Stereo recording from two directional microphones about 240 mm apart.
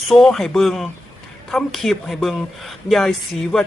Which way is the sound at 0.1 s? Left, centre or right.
Centre.